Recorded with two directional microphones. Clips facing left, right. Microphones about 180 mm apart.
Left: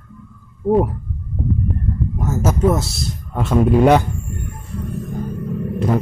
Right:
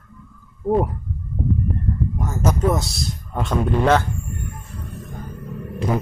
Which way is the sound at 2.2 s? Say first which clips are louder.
Left 4 dB; 5° left (ahead or behind).